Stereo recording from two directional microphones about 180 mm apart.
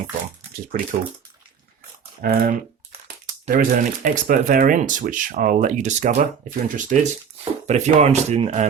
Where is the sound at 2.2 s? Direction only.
55° right (ahead or behind).